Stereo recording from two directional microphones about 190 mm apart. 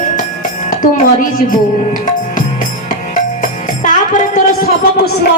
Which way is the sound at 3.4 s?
45° left (ahead or behind).